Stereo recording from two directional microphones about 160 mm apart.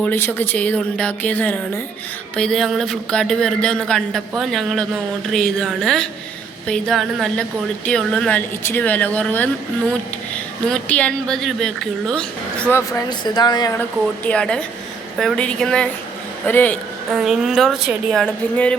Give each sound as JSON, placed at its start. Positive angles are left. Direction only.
{"t": 0.0, "sound": "speech", "side_deg": 10}
{"t": 13.1, "sound": "a woman's voice", "side_deg": 25}
{"t": 14.3, "sound": "speech", "side_deg": 5}
{"t": 17.1, "sound": "speech", "side_deg": -5}